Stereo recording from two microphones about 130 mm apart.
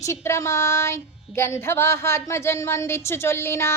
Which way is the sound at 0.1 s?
20° left (ahead or behind).